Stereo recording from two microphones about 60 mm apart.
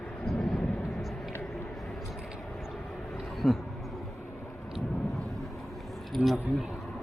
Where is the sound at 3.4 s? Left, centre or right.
Left.